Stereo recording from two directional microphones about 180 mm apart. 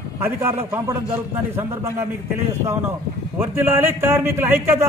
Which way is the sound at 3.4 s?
10° right (ahead or behind).